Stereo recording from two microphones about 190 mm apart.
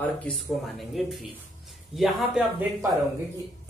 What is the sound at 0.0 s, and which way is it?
Speech, 5° left (ahead or behind).